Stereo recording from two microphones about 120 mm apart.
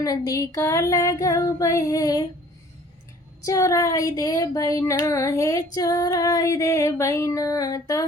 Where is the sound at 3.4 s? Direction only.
25° left (ahead or behind).